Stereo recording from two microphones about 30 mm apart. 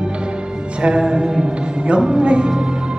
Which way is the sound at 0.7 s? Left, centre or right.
Right.